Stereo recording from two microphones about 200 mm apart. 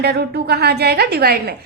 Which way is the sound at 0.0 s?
55° right (ahead or behind).